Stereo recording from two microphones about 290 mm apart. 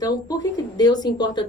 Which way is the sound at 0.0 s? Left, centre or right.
Centre.